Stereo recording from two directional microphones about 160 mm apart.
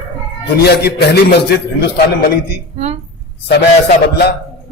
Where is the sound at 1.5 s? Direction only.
90° left.